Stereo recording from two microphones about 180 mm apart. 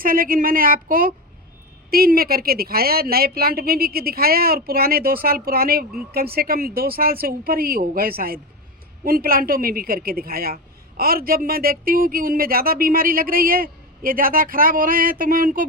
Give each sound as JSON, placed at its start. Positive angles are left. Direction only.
{"t": 0.0, "sound": "a man's voice", "side_deg": -50}